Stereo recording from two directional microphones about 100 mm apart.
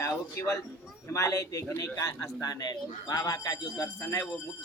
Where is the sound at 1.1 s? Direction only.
30° left (ahead or behind).